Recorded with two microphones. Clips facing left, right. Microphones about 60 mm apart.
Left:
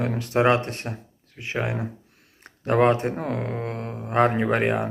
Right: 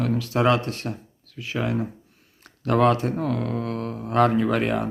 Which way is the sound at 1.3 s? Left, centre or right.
Left.